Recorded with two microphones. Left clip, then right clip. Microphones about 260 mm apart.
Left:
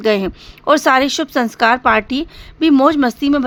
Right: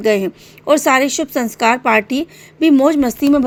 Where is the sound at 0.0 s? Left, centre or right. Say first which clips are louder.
Right 1 dB; centre.